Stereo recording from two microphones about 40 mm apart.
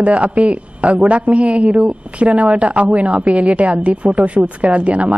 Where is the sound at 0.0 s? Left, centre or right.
Right.